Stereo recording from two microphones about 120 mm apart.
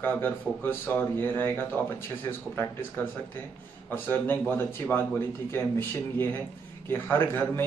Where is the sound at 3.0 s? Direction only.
20° left (ahead or behind).